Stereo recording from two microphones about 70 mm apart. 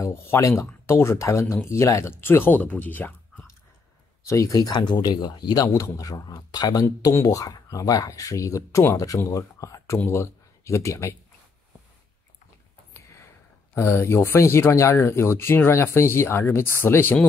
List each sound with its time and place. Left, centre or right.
0.0 s speech: left
4.3 s speech: left
5.7 s speech: left
7.2 s speech: left
7.7 s speech: left
12.9 s a sound: left
13.7 s speech: left